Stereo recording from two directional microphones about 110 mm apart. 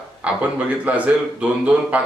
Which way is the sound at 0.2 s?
10° right (ahead or behind).